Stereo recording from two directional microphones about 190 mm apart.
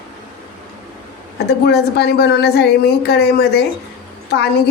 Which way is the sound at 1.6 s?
60° left (ahead or behind).